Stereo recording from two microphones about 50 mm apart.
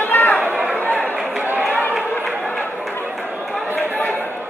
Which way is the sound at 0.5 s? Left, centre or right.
Centre.